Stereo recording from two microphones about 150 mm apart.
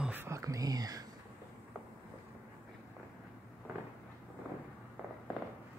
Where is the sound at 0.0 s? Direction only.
15° right (ahead or behind).